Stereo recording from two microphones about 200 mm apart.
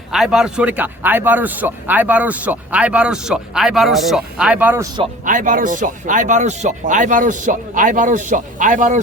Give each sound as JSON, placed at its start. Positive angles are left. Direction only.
{"t": 0.1, "sound": "a man's voice", "side_deg": 0}
{"t": 5.2, "sound": "speech", "side_deg": -40}